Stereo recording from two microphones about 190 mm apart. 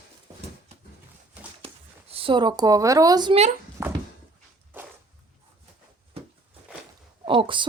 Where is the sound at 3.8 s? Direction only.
15° right (ahead or behind).